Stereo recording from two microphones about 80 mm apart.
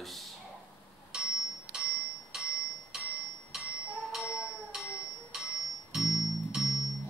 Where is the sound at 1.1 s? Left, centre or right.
Centre.